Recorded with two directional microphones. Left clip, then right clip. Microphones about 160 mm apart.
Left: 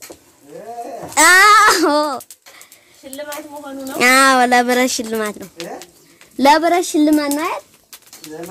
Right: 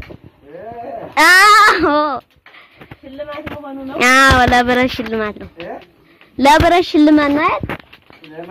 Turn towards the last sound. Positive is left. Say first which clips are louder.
# right 5 dB
turn(degrees=-20)  # may be behind; listen again after turning